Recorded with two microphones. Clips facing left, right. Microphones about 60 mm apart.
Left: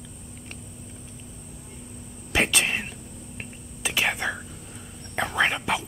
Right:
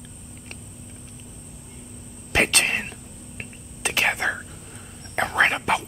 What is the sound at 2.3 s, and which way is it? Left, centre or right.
Whispering, right.